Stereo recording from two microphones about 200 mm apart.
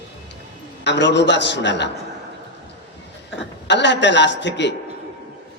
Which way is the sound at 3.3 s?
60° left (ahead or behind).